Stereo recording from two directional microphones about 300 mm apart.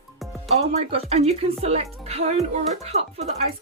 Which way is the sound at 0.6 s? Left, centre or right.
Centre.